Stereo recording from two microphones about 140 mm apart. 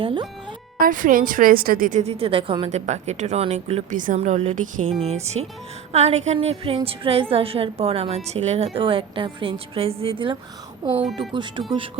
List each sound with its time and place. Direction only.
0.0 s a woman's voice: 35° right (ahead or behind)
0.8 s a woman's voice: 75° right (ahead or behind); by 2.6 s 40° right (ahead or behind)
2.6 s a woman's voice: 55° right (ahead or behind)
3.9 s a woman's voice: 65° right (ahead or behind)
4.9 s a woman's voice: 45° right (ahead or behind)
10.9 s speech: 5° right (ahead or behind)